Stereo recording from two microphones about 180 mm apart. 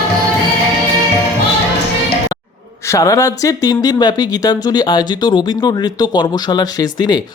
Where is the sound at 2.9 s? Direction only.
20° left (ahead or behind).